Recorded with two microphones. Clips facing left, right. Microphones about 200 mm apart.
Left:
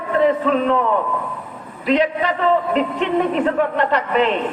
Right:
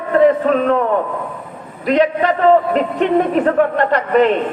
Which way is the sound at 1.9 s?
45° right (ahead or behind).